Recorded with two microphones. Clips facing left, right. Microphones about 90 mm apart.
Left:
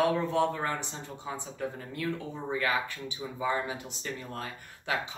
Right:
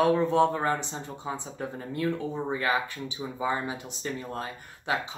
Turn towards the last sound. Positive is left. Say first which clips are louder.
# right 3 dB
turn(degrees=-25)  # may be behind; listen again after turning